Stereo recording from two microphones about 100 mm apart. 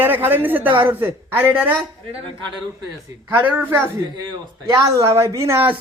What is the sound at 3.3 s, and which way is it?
Speech, 20° right (ahead or behind).